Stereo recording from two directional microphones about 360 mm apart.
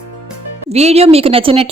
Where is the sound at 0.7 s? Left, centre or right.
Centre.